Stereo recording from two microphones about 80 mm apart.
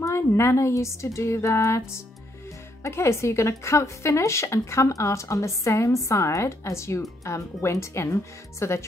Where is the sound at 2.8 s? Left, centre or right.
Left.